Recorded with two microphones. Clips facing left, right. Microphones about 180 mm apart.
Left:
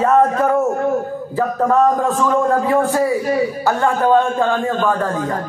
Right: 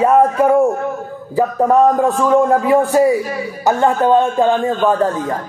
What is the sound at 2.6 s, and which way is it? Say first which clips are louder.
A man's voice: right 4 dB; 15° right (ahead or behind).